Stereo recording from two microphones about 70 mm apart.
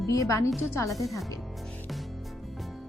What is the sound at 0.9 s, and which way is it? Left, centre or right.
Speech, centre.